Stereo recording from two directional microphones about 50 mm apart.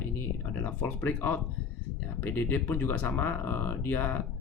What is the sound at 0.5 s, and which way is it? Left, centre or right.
Speech, left.